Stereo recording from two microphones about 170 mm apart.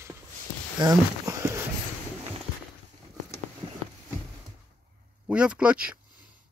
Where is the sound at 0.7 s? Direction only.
20° right (ahead or behind).